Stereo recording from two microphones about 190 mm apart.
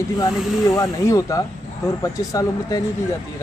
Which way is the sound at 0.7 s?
15° left (ahead or behind).